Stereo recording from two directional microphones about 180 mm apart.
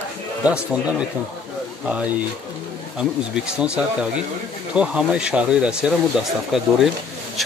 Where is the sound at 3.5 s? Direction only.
5° right (ahead or behind).